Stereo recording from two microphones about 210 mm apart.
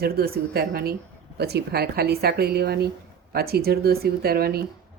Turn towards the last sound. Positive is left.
turn(degrees=-45)  # may be behind; listen again after turning